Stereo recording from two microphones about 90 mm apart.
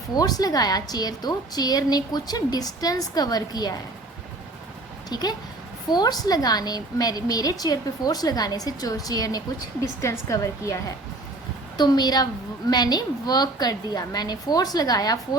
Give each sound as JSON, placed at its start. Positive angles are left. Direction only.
{"t": 0.1, "sound": "a woman's voice", "side_deg": 45}
{"t": 5.0, "sound": "a woman's voice", "side_deg": 50}
{"t": 10.0, "sound": "a woman's voice", "side_deg": 35}
{"t": 11.8, "sound": "a woman's voice", "side_deg": 50}